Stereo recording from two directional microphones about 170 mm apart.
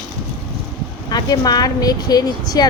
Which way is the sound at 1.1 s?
25° left (ahead or behind).